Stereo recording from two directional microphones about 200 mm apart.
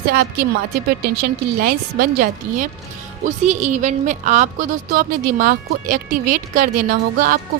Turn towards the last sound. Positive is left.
turn(degrees=-45)  # may be behind; listen again after turning